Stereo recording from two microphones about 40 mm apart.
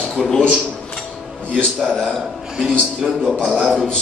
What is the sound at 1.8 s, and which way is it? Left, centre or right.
Speech, centre.